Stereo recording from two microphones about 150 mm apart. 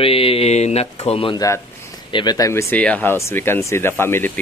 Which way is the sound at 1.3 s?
20° left (ahead or behind).